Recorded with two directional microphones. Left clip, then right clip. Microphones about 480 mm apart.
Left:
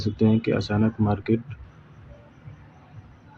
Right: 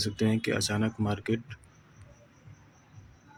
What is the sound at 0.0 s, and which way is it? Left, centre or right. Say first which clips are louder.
Speech: left 6 dB; right.